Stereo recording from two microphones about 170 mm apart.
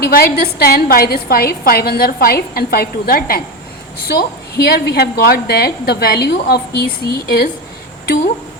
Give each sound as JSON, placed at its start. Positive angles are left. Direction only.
{"t": 0.1, "sound": "a woman's voice", "side_deg": 60}